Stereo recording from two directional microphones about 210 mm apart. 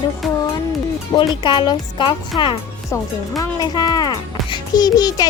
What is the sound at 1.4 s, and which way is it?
A child's voice, 20° left (ahead or behind).